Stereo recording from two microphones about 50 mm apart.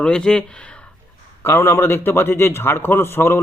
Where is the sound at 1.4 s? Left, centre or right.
Left.